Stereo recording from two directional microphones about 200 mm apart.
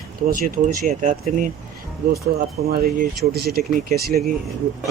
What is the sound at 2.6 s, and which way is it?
Speech, 50° right (ahead or behind).